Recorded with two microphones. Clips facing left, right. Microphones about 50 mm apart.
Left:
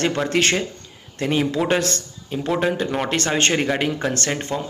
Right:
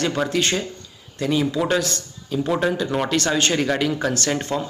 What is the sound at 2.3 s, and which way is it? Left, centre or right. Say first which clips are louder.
Speech: even; left.